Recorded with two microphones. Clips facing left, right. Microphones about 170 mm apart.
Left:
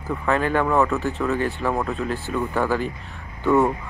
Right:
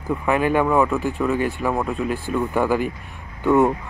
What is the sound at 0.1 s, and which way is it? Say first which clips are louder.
Speech: right 2 dB; 10° right (ahead or behind).